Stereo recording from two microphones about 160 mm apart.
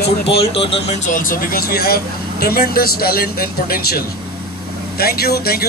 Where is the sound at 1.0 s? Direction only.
55° left (ahead or behind); by 5.6 s 75° left (ahead or behind).